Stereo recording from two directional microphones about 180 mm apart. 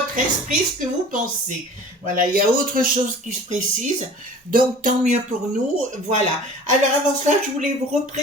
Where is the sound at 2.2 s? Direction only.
50° right (ahead or behind).